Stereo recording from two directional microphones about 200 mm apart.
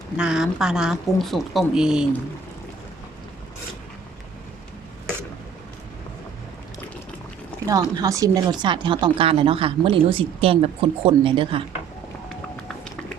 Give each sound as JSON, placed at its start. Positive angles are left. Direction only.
{"t": 0.2, "sound": "speech", "side_deg": -5}
{"t": 7.7, "sound": "speech", "side_deg": -15}